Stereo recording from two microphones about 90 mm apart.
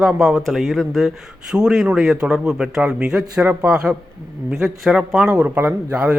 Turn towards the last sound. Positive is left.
turn(degrees=-15)  # may be behind; listen again after turning